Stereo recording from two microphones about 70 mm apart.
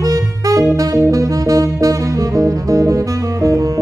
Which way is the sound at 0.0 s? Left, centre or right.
Right.